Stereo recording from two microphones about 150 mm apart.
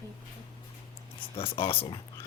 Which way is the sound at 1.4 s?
40° left (ahead or behind).